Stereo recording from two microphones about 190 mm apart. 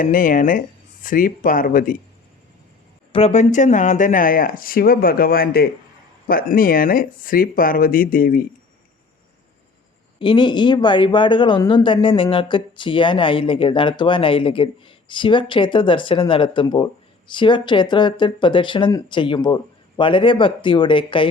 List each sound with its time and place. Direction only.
0.0 s speech: 45° left (ahead or behind)
3.1 s speech: 30° left (ahead or behind); by 8.4 s 50° left (ahead or behind)
10.2 s speech: 25° left (ahead or behind)